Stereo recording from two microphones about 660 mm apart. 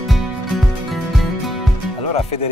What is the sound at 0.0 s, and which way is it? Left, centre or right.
Music, centre.